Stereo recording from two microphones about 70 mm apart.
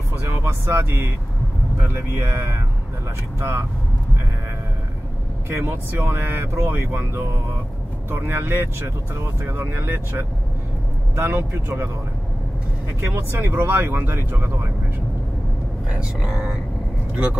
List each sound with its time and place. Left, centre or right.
0.3 s speech: right
5.5 s speech: right
13.0 s speech: right
15.9 s speech: centre